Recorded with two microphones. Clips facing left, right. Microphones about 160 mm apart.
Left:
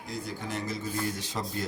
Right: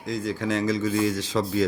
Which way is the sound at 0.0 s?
90° right.